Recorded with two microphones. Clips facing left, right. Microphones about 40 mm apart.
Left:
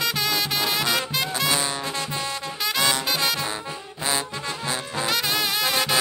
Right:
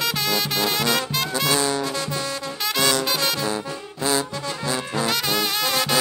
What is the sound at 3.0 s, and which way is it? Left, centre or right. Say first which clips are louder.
Music: right 1 dB; centre.